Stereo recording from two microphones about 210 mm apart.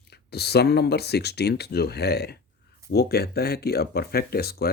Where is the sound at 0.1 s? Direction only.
50° left (ahead or behind).